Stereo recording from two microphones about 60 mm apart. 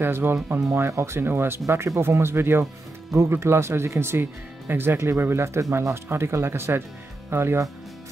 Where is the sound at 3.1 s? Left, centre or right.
Right.